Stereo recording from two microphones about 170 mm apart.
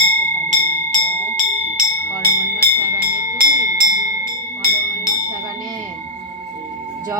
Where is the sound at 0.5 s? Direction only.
50° right (ahead or behind).